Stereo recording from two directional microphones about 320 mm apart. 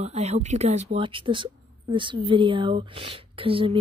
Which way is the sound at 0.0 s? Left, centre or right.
Right.